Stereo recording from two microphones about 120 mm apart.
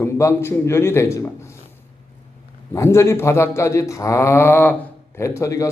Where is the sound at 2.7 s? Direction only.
25° left (ahead or behind).